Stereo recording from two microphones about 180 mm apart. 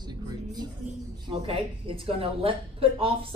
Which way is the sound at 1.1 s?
30° right (ahead or behind).